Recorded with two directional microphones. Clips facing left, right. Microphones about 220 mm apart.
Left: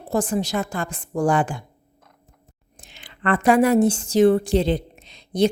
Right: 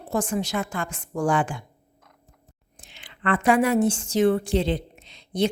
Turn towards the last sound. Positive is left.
turn(degrees=40)  # may be behind; listen again after turning